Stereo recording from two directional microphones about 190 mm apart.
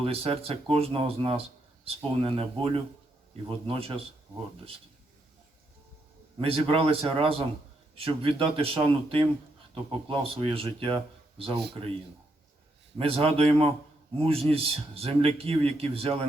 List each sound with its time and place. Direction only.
0.0 s a man's voice: 30° right (ahead or behind)
6.4 s speech: 30° right (ahead or behind)
13.0 s a man's voice: 30° right (ahead or behind)